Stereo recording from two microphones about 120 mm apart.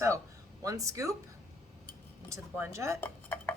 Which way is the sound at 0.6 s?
30° right (ahead or behind).